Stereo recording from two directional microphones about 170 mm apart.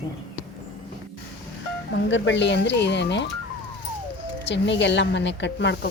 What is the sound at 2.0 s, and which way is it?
Speech, 90° left.